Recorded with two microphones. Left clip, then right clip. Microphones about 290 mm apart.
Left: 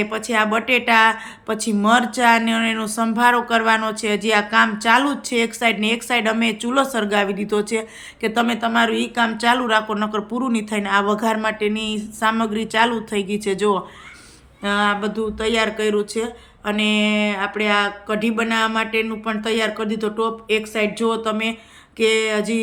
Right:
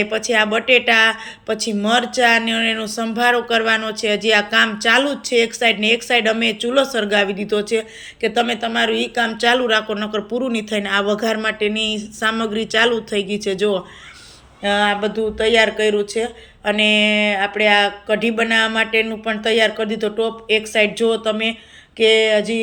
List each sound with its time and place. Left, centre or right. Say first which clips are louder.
0.0 s speech: right 3 dB; centre